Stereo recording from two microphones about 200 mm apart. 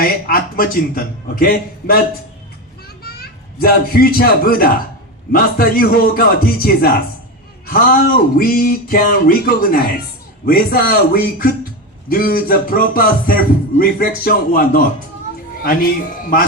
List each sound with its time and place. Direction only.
0.0 s a child's voice: 45° left (ahead or behind)
10.4 s speech: 50° left (ahead or behind)